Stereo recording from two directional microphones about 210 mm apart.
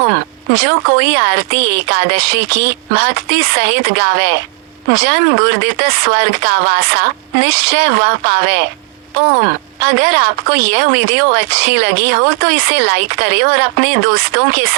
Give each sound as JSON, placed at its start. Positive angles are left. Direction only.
{"t": 0.5, "sound": "speech", "side_deg": -50}